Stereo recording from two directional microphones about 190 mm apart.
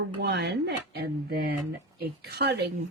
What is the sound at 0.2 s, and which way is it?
Speech, 65° right (ahead or behind).